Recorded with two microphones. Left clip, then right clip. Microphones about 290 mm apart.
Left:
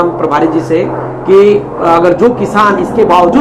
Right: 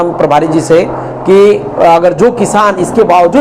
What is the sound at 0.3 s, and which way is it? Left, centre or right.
Speech, right.